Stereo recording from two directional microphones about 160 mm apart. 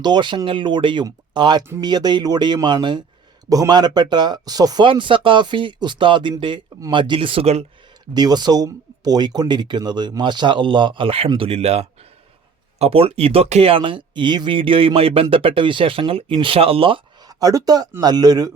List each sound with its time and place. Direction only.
0.0 s speech: 30° right (ahead or behind)
8.1 s speech: 25° right (ahead or behind)